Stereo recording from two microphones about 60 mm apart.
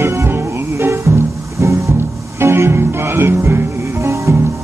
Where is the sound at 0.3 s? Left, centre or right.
Right.